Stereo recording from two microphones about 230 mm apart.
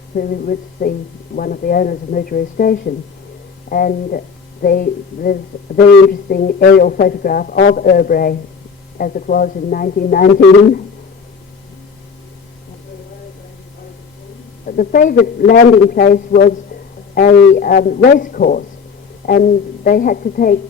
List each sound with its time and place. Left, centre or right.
0.1 s a woman's voice: left
14.7 s a woman's voice: left